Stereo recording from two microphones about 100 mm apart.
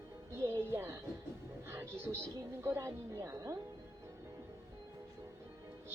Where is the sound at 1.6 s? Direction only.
25° right (ahead or behind).